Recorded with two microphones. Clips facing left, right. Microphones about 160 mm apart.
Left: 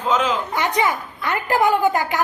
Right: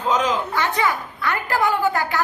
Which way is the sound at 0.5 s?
20° left (ahead or behind).